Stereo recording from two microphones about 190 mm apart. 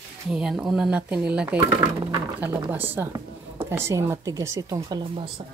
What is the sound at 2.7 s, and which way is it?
A woman's voice, 10° right (ahead or behind).